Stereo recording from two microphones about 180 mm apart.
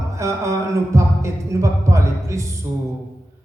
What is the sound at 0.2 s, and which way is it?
Speech, 15° right (ahead or behind).